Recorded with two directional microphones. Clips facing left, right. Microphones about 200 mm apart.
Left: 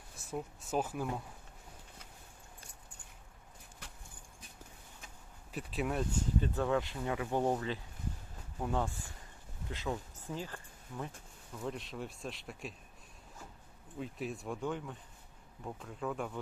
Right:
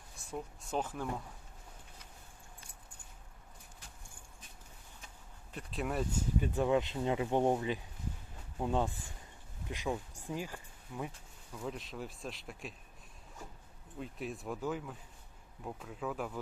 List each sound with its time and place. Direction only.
0.2 s speech: 5° left (ahead or behind)
5.5 s speech: 5° left (ahead or behind)
6.4 s speech: 15° right (ahead or behind)
11.6 s speech: centre (ahead or behind)
14.0 s speech: centre (ahead or behind)